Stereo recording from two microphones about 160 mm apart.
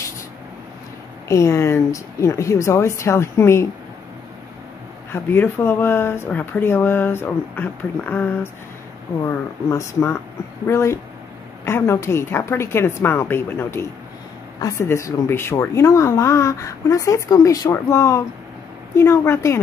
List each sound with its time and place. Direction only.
1.3 s speech: 20° left (ahead or behind)
5.1 s speech: 15° left (ahead or behind)